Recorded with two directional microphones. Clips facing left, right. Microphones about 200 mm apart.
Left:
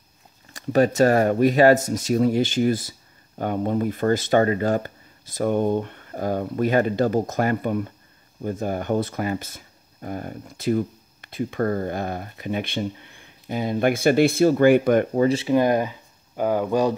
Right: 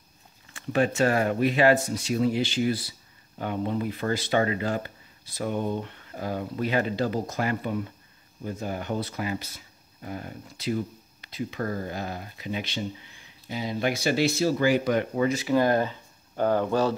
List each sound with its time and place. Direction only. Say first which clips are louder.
0.5 s speech: left 6 dB; 40° left (ahead or behind)
15.1 s speech: left 4 dB; 30° left (ahead or behind); by 16.9 s 10° left (ahead or behind)